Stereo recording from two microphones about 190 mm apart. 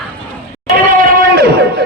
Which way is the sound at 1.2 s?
55° right (ahead or behind).